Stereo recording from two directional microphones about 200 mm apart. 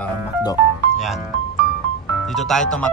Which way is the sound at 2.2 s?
Centre (ahead or behind).